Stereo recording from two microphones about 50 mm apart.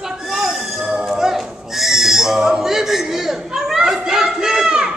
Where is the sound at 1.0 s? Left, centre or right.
Centre.